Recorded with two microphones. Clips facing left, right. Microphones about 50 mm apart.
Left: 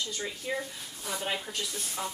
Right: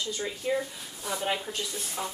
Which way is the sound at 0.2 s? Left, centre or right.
Centre.